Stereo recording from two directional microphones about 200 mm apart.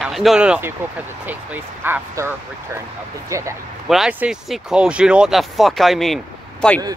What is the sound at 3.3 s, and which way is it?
Speech, 15° right (ahead or behind).